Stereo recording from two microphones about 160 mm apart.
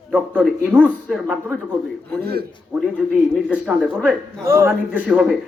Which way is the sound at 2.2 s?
80° right.